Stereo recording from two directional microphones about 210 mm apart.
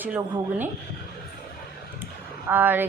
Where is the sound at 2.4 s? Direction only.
10° right (ahead or behind).